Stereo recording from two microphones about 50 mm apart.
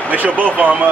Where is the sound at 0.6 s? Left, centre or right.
Right.